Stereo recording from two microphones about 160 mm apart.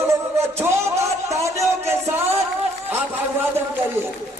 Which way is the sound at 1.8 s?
15° right (ahead or behind).